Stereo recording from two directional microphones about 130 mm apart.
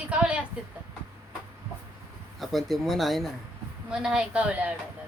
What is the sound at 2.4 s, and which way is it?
Speech, centre (ahead or behind).